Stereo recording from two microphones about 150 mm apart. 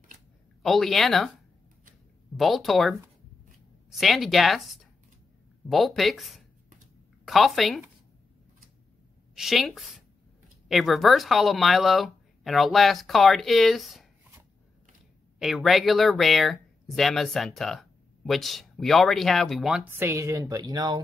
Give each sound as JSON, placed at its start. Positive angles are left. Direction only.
{"t": 0.6, "sound": "speech", "side_deg": 0}
{"t": 2.3, "sound": "speech", "side_deg": 0}
{"t": 9.3, "sound": "a woman's voice", "side_deg": 0}
{"t": 15.3, "sound": "speech", "side_deg": 0}
{"t": 19.8, "sound": "speech", "side_deg": -15}